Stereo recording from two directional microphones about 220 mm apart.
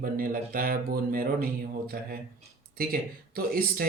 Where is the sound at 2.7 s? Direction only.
40° right (ahead or behind).